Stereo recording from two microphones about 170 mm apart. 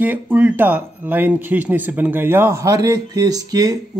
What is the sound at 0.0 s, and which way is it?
A man's voice, 10° right (ahead or behind).